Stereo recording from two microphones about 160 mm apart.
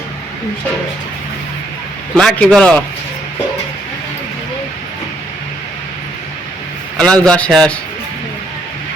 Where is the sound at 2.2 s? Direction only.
5° left (ahead or behind).